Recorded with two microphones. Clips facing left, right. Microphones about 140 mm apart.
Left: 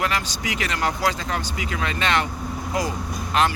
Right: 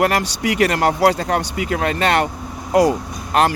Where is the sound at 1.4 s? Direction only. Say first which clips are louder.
Right 7 dB; 55° right (ahead or behind).